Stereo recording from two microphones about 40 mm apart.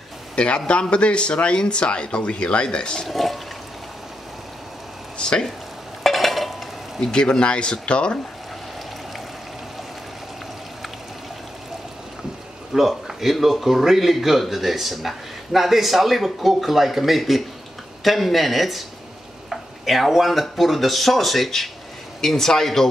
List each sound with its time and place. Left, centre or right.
0.7 s speech: left
3.1 s speech: centre
5.1 s a sound: left
6.0 s a sound: centre
7.0 s speech: left
12.7 s speech: centre